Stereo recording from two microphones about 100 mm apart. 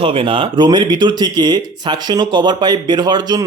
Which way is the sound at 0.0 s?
60° right (ahead or behind).